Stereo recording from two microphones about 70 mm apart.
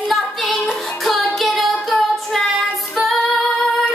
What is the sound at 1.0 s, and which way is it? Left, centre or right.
Music, centre.